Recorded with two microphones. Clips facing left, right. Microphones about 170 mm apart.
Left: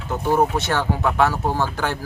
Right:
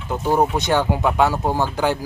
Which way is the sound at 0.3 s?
15° right (ahead or behind).